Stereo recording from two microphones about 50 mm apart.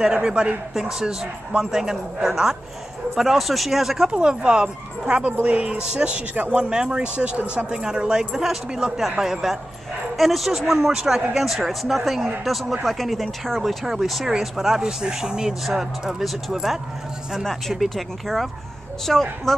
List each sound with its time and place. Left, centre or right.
0.0 s speech: right
0.7 s speech: centre
4.1 s speech: centre